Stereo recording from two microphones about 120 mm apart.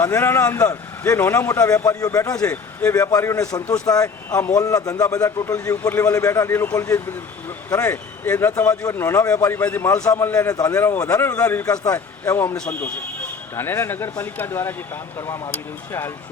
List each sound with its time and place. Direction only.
0.0 s a man's voice: 20° left (ahead or behind)
2.4 s a man's voice: 15° left (ahead or behind)
2.9 s a man's voice: 25° left (ahead or behind)
11.7 s a man's voice: 30° left (ahead or behind)
12.5 s speech: 10° left (ahead or behind)
13.6 s a man's voice: 20° left (ahead or behind)